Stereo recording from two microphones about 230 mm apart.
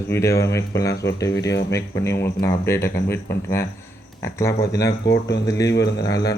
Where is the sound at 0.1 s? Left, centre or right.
Centre.